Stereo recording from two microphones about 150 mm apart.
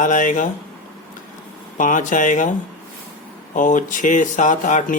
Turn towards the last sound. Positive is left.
turn(degrees=60)  # may be behind; listen again after turning